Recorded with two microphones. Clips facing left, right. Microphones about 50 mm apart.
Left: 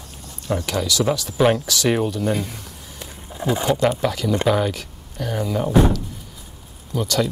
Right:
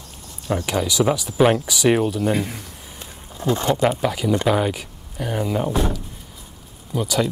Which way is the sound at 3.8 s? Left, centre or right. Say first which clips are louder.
Even; centre.